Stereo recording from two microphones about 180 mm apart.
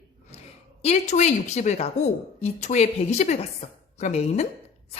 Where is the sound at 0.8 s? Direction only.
35° left (ahead or behind).